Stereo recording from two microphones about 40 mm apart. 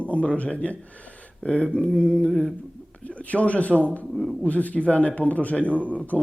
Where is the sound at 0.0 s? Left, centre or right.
Left.